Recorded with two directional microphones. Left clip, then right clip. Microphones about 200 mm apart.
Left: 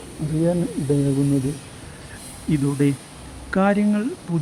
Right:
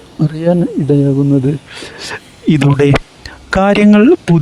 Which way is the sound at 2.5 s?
55° right (ahead or behind).